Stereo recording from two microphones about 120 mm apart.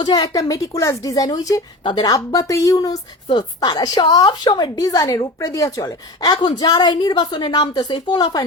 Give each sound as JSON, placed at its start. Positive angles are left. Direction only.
{"t": 0.0, "sound": "a woman's voice", "side_deg": 30}